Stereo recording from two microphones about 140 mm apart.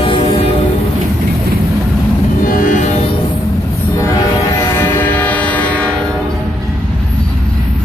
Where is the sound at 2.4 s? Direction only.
80° left; by 3.0 s 65° left (ahead or behind).